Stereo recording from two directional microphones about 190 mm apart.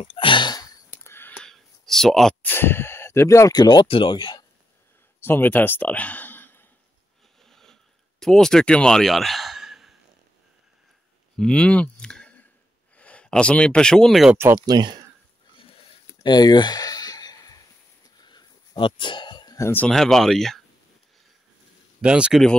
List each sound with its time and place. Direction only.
0.0 s a sound: 30° left (ahead or behind)
1.0 s speech: 10° left (ahead or behind)
5.2 s speech: 10° left (ahead or behind)
7.4 s mechanisms: centre (ahead or behind)
8.2 s speech: 5° left (ahead or behind)
11.3 s speech: 5° left (ahead or behind)
14.3 s speech: 15° right (ahead or behind)
16.1 s a sound: 20° left (ahead or behind); by 20.6 s centre (ahead or behind)
22.0 s speech: 5° right (ahead or behind)